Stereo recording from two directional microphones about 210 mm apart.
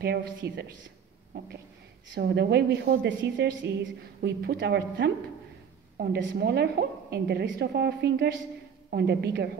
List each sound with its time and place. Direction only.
0.0 s a woman's voice: 50° right (ahead or behind)